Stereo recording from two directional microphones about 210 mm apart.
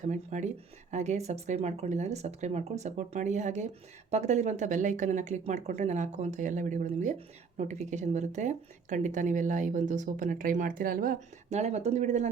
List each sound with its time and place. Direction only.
0.1 s speech: 35° right (ahead or behind)